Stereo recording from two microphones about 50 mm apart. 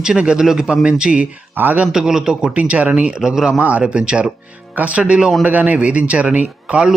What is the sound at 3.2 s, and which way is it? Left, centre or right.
Speech, centre.